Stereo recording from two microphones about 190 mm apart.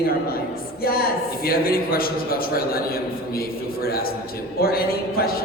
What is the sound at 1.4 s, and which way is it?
A woman's voice, 50° left (ahead or behind).